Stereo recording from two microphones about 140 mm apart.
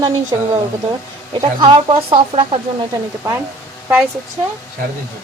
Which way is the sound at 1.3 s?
40° right (ahead or behind).